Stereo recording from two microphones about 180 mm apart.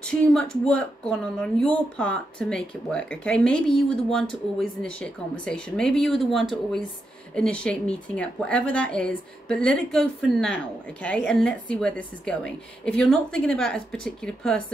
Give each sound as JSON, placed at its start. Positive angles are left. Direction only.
{"t": 0.0, "sound": "speech", "side_deg": 5}